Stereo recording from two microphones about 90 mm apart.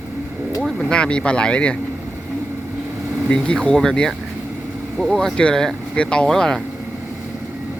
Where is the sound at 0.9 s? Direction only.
10° left (ahead or behind).